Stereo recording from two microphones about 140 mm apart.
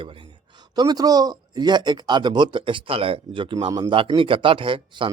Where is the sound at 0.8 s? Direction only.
30° right (ahead or behind).